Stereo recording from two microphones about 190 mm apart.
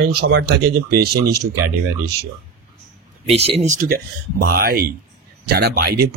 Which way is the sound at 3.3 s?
30° right (ahead or behind).